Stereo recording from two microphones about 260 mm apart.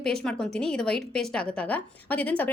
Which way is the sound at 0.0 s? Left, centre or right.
Centre.